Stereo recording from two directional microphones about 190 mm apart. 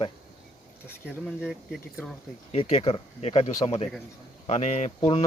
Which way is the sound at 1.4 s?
5° right (ahead or behind).